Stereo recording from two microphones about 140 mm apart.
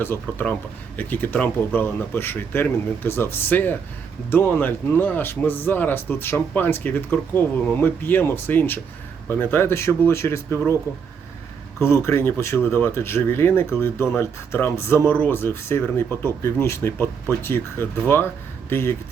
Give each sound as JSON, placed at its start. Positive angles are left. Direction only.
{"t": 0.0, "sound": "speech", "side_deg": 15}
{"t": 11.8, "sound": "speech", "side_deg": 15}